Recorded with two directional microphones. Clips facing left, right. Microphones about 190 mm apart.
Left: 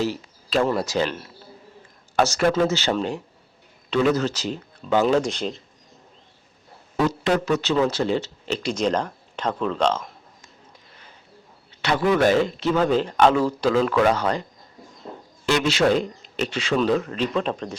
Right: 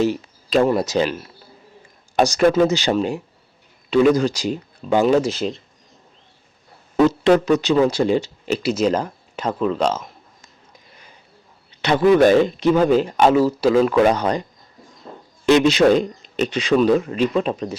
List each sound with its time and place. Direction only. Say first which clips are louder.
0.0 s speech: right 6 dB; 15° right (ahead or behind)
2.1 s speech: right 4 dB; 15° right (ahead or behind)
7.3 s speech: right 6 dB; 20° right (ahead or behind)
11.8 s speech: right 6 dB; 20° right (ahead or behind)
15.4 s speech: right 6 dB; 20° right (ahead or behind)